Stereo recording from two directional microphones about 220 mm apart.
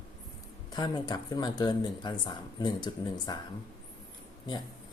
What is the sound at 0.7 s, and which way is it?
Speech, 20° left (ahead or behind).